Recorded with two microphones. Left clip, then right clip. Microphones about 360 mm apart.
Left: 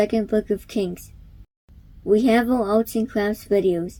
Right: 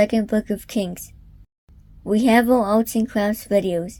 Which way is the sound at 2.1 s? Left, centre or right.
Right.